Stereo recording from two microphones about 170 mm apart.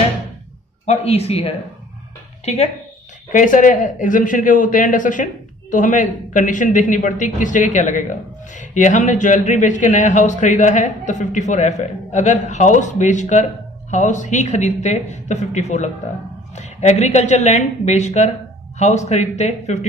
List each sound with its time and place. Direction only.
0.8 s a woman's voice: 35° left (ahead or behind)